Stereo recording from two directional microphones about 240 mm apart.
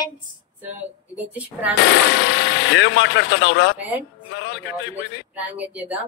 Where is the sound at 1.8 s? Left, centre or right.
Left.